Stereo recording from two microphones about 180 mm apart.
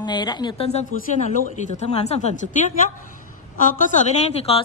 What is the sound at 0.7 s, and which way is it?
A woman's voice, 40° left (ahead or behind).